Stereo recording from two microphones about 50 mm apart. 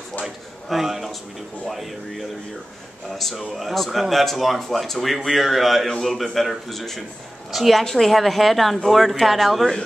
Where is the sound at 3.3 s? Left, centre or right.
Centre.